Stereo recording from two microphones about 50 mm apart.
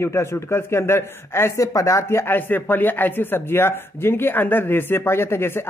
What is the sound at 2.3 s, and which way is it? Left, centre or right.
Speech, left.